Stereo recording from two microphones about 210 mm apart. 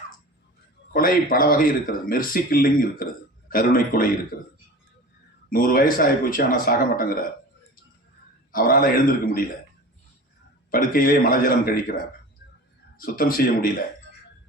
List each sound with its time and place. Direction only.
0.9 s speech: 45° left (ahead or behind)
5.5 s speech: 45° left (ahead or behind)
8.5 s speech: 45° left (ahead or behind)
10.7 s speech: 40° left (ahead or behind)
13.0 s speech: 45° left (ahead or behind)